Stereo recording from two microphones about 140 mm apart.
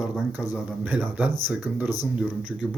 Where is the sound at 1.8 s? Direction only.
25° left (ahead or behind).